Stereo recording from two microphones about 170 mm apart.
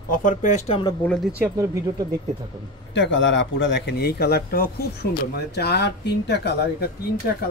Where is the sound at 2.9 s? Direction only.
90° left.